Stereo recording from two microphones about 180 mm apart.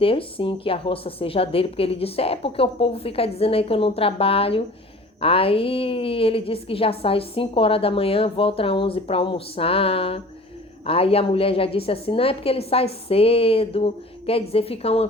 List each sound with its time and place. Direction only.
0.0 s a woman's voice: 30° left (ahead or behind)